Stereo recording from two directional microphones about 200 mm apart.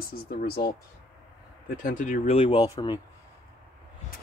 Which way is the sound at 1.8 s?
40° left (ahead or behind).